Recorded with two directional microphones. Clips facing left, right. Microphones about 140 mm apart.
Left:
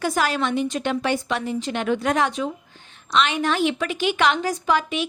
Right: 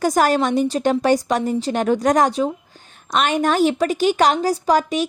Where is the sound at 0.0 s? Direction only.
40° right (ahead or behind).